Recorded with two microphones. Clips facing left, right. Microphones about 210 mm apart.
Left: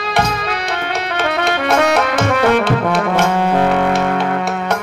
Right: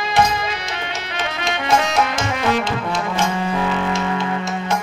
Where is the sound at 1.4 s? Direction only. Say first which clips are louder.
Left 4 dB; 60° left (ahead or behind).